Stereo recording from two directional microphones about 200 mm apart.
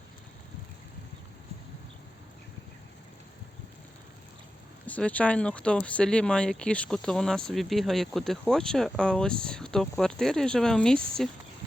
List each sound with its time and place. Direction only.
4.9 s speech: 5° left (ahead or behind)